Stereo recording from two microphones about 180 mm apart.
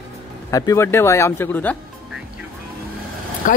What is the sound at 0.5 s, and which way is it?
Speech, 20° left (ahead or behind).